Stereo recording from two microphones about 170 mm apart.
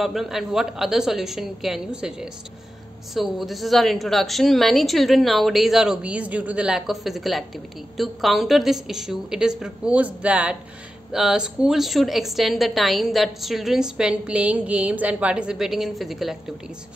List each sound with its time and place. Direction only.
0.0 s a woman's voice: centre (ahead or behind)